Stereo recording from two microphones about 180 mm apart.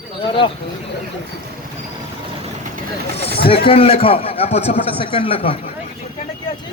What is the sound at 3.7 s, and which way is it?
A man's voice, 30° left (ahead or behind).